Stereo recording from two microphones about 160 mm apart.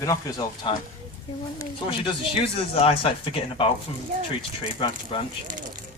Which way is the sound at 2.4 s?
35° left (ahead or behind).